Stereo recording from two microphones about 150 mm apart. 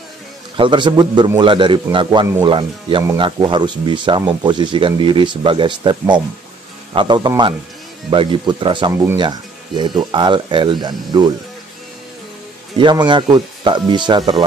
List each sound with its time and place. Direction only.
0.6 s a man's voice: 30° right (ahead or behind)
12.7 s speech: 30° right (ahead or behind)